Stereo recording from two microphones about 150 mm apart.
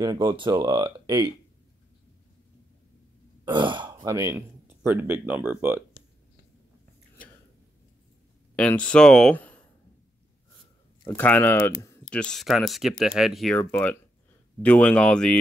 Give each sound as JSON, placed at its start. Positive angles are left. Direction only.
{"t": 0.0, "sound": "speech", "side_deg": -25}
{"t": 3.5, "sound": "speech", "side_deg": -30}
{"t": 8.5, "sound": "speech", "side_deg": 10}
{"t": 11.1, "sound": "speech", "side_deg": 10}
{"t": 12.1, "sound": "speech", "side_deg": 5}
{"t": 13.6, "sound": "speech", "side_deg": 10}